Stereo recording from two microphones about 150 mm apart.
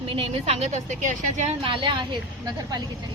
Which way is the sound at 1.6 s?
35° right (ahead or behind).